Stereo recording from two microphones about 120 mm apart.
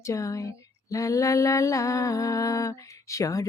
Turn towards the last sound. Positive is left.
turn(degrees=25)  # may be behind; listen again after turning